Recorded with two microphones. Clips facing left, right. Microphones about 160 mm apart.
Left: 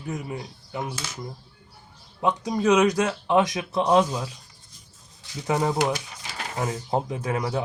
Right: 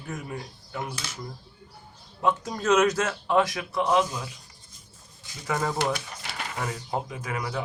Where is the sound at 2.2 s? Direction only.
15° left (ahead or behind).